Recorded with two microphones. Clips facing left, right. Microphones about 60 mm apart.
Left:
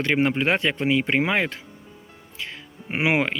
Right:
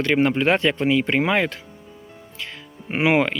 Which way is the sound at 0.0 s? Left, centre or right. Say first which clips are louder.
Right 3 dB; centre.